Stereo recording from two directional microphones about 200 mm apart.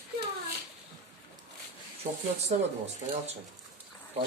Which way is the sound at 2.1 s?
40° right (ahead or behind).